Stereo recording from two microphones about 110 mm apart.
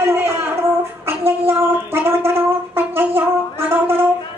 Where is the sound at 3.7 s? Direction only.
20° right (ahead or behind).